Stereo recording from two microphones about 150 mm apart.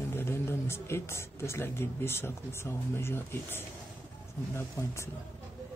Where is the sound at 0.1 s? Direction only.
15° left (ahead or behind).